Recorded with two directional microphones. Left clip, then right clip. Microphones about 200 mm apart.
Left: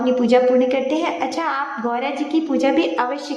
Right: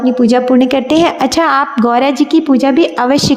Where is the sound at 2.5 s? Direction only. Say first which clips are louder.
Right 7 dB; 35° right (ahead or behind).